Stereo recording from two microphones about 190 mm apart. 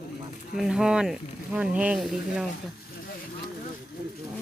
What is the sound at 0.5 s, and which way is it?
Speech, centre (ahead or behind).